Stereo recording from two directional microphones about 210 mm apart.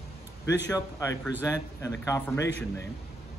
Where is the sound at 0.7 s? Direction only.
15° left (ahead or behind).